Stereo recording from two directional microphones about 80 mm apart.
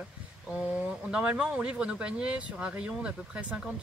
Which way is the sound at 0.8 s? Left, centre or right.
Centre.